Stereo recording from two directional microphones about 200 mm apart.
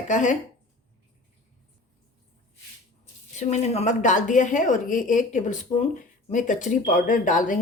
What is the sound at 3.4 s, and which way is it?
Speech, 35° left (ahead or behind).